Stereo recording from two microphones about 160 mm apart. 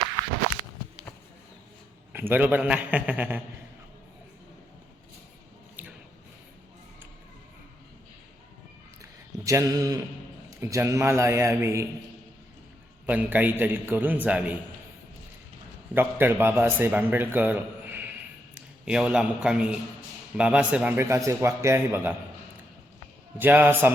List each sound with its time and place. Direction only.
2.1 s a man's voice: 10° right (ahead or behind)
5.8 s squish: 10° right (ahead or behind)
9.0 s a sound: 20° right (ahead or behind)
10.5 s a man's voice: 20° right (ahead or behind)
13.1 s a man's voice: 10° right (ahead or behind)
16.0 s a man's voice: 10° right (ahead or behind)
23.4 s a man's voice: 10° right (ahead or behind)